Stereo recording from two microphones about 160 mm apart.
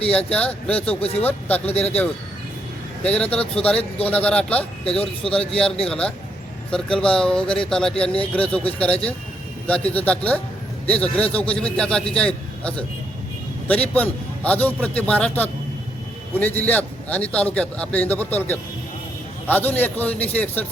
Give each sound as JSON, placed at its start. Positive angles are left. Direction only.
{"t": 0.1, "sound": "a man's voice", "side_deg": 5}
{"t": 3.0, "sound": "a man's voice", "side_deg": 5}
{"t": 5.8, "sound": "a man's voice", "side_deg": 5}